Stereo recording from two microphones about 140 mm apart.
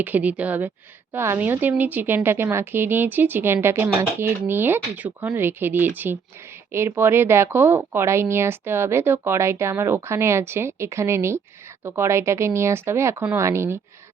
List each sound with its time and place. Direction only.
0.0 s speech: 10° right (ahead or behind)